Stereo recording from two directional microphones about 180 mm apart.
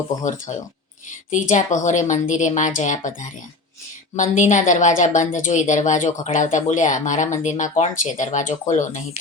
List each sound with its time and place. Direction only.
0.5 s a woman's voice: 40° left (ahead or behind)